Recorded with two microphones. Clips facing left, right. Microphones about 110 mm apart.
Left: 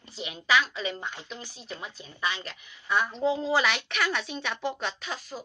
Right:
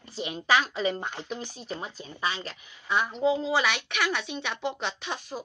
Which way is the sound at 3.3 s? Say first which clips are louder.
Even; 5° right (ahead or behind).